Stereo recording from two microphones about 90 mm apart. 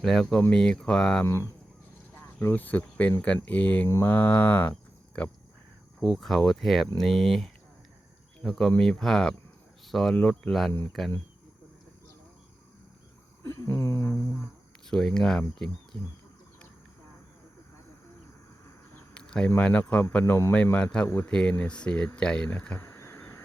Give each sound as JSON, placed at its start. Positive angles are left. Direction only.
{"t": 0.0, "sound": "speech", "side_deg": 5}
{"t": 1.2, "sound": "speech", "side_deg": 30}
{"t": 3.8, "sound": "a sound", "side_deg": 30}
{"t": 4.1, "sound": "speech", "side_deg": 20}
{"t": 6.0, "sound": "speech", "side_deg": 0}
{"t": 10.2, "sound": "speech", "side_deg": 15}
{"t": 13.7, "sound": "a sound", "side_deg": 30}
{"t": 14.8, "sound": "speech", "side_deg": 5}
{"t": 19.1, "sound": "cricket", "side_deg": 10}
{"t": 19.5, "sound": "speech", "side_deg": 15}
{"t": 22.4, "sound": "a sound", "side_deg": 20}